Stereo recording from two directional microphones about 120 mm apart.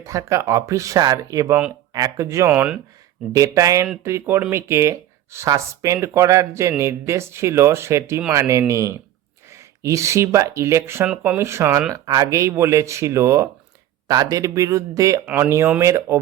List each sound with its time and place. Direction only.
0.0 s speech: 25° right (ahead or behind)
2.5 s speech: 10° right (ahead or behind)
3.3 s speech: 25° right (ahead or behind)
11.1 s speech: 10° right (ahead or behind)
11.3 s speech: 20° right (ahead or behind)